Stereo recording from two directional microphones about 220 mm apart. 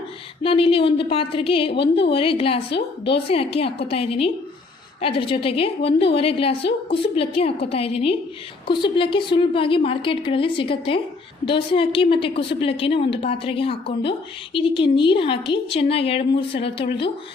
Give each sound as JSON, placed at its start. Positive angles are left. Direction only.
{"t": 0.4, "sound": "a woman's voice", "side_deg": 25}